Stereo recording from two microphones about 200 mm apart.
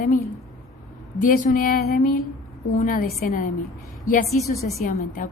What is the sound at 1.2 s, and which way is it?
A woman's voice, 40° left (ahead or behind).